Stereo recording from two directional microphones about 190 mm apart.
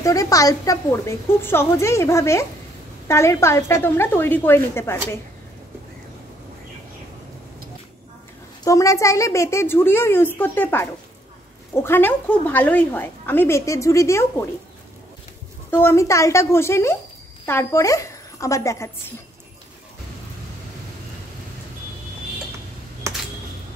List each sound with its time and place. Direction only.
0.0 s a woman's voice: 15° left (ahead or behind)
8.6 s a woman's voice: 15° left (ahead or behind)
15.7 s a woman's voice: 10° left (ahead or behind)
23.0 s computer keyboard: 15° right (ahead or behind)